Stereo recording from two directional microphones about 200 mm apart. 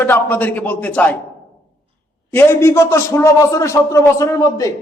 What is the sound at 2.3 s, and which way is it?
A man's voice, 10° left (ahead or behind).